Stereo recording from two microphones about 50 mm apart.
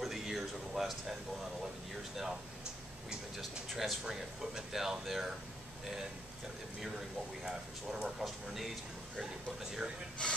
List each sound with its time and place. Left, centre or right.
0.0 s speech: centre
3.1 s speech: centre
7.4 s speech: centre
10.2 s speech: centre